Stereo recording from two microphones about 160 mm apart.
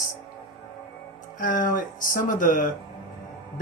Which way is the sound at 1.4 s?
55° left (ahead or behind).